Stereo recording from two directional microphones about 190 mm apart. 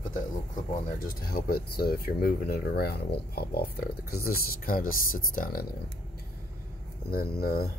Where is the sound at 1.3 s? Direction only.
55° left (ahead or behind).